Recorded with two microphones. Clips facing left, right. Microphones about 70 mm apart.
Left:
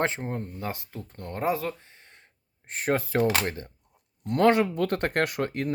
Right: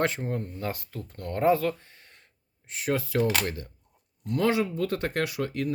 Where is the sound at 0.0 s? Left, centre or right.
Left.